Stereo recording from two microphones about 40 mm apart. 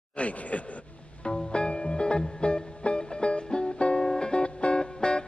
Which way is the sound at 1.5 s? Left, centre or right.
Left.